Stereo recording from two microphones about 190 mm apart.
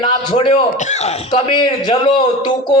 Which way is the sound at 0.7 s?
40° left (ahead or behind).